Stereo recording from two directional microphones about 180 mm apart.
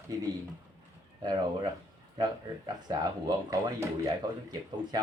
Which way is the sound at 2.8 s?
25° right (ahead or behind).